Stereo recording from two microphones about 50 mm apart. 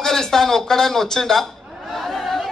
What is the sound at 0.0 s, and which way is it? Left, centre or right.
Speech, centre.